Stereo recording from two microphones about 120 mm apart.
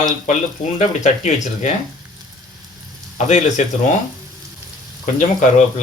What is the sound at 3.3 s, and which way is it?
Speech, 90° left.